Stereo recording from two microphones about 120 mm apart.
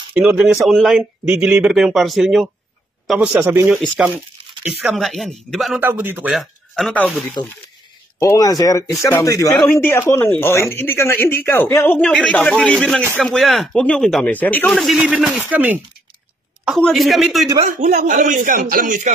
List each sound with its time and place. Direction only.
0.1 s speech: 10° right (ahead or behind)
3.3 s speech: 20° right (ahead or behind); by 5.8 s centre (ahead or behind)
5.8 s speech: 15° right (ahead or behind)
6.3 s speech: centre (ahead or behind)
8.2 s speech: 25° left (ahead or behind)
9.7 s speech: 15° left (ahead or behind)
14.7 s speech: centre (ahead or behind)
15.5 s speech: 15° right (ahead or behind)
16.6 s speech: centre (ahead or behind)
17.6 s speech: 90° right